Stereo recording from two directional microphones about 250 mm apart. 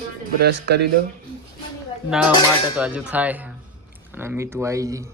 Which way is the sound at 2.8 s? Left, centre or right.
Centre.